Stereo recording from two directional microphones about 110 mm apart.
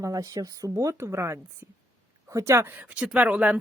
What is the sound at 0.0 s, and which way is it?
A woman's voice, 30° right (ahead or behind).